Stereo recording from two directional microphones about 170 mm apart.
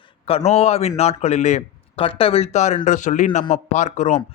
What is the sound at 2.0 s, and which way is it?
A man's voice, 35° left (ahead or behind).